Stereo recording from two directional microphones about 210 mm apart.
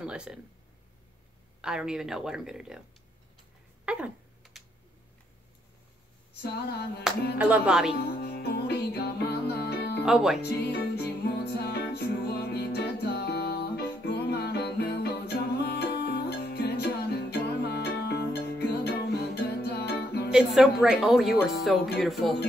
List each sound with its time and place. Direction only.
0.0 s speech: 5° right (ahead or behind)
1.6 s speech: 5° right (ahead or behind)
3.8 s a sound: 5° right (ahead or behind)
7.3 s speech: 5° right (ahead or behind)
8.0 s music: 50° left (ahead or behind)
10.0 s speech: centre (ahead or behind)
10.4 s music: 50° left (ahead or behind)
20.2 s speech: centre (ahead or behind)